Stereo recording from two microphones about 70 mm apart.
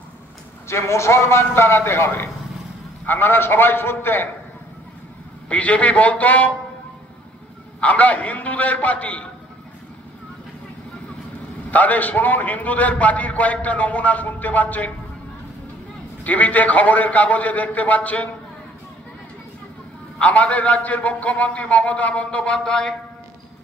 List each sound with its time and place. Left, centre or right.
0.7 s a man's voice: left
5.5 s a man's voice: centre
7.8 s a man's voice: left
11.7 s a man's voice: left
16.3 s a man's voice: left
20.2 s a man's voice: left